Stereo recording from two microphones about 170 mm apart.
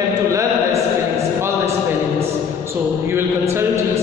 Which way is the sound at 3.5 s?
15° right (ahead or behind).